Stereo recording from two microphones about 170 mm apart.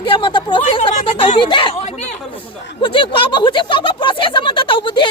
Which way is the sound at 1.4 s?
30° left (ahead or behind).